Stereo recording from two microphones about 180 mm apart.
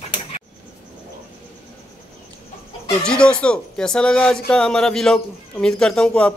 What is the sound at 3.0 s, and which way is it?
Speech, 5° left (ahead or behind).